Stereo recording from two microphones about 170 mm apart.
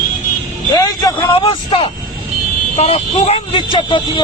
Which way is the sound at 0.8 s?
20° left (ahead or behind).